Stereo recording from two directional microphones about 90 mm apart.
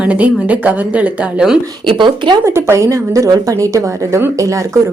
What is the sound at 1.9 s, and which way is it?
Speech, 65° right (ahead or behind).